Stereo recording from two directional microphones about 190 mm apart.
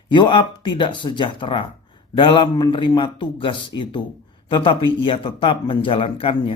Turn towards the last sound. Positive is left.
turn(degrees=30)  # may be behind; listen again after turning